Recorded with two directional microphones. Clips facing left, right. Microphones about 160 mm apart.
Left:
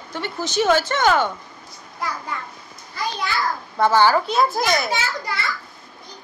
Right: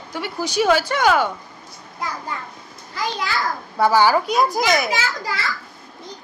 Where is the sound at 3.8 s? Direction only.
10° right (ahead or behind).